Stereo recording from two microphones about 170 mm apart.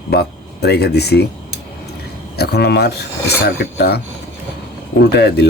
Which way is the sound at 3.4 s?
85° left.